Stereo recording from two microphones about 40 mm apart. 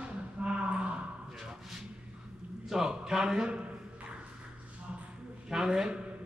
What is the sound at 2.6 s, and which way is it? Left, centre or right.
Speech, centre.